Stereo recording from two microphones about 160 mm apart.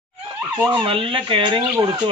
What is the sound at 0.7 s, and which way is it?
Speech, 35° right (ahead or behind).